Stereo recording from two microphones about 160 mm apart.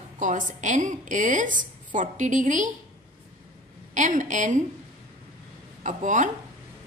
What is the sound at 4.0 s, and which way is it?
Speech, 50° right (ahead or behind).